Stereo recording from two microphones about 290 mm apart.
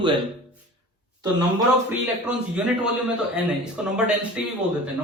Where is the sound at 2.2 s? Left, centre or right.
Centre.